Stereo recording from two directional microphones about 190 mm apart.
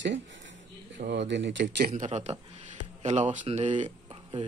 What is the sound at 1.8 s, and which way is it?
Speech, 40° right (ahead or behind).